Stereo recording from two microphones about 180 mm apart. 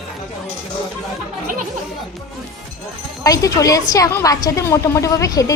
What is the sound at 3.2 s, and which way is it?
A woman's voice, 20° left (ahead or behind).